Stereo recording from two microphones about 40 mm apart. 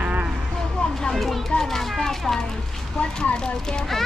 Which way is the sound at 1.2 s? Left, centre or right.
Centre.